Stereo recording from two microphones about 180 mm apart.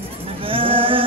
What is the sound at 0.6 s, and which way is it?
Music, 30° right (ahead or behind).